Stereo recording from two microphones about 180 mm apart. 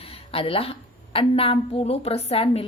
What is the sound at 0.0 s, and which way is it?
A woman's voice, 35° left (ahead or behind).